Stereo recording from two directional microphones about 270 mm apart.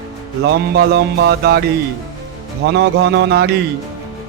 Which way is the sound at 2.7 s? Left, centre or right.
Right.